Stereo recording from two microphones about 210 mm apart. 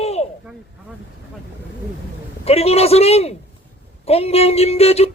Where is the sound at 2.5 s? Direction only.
30° left (ahead or behind).